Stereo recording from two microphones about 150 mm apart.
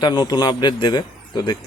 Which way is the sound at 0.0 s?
30° left (ahead or behind).